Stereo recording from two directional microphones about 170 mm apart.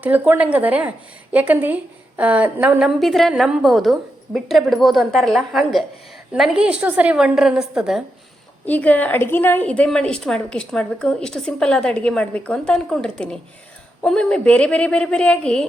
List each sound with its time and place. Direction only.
0.0 s a woman's voice: 10° right (ahead or behind)
8.6 s a woman's voice: 10° left (ahead or behind)